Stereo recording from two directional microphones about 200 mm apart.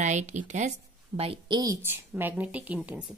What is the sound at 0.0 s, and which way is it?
A woman's voice, 35° right (ahead or behind).